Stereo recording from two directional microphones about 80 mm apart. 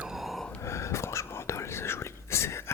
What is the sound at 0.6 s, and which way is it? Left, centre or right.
Whispering, left.